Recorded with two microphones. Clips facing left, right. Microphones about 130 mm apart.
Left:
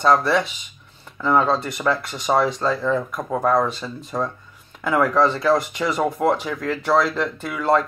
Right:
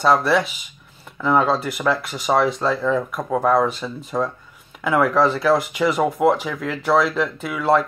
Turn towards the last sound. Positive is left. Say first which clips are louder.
# right 1 dB
turn(degrees=0)  # may be behind; listen again after turning